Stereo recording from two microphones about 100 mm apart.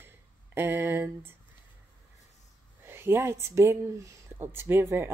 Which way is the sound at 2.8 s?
25° right (ahead or behind).